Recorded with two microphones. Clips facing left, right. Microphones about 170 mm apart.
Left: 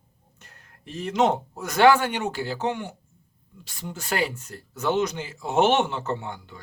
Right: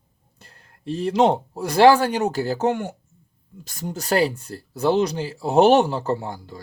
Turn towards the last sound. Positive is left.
turn(degrees=-35)  # may be behind; listen again after turning